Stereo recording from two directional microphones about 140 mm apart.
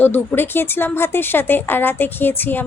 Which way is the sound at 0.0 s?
15° left (ahead or behind).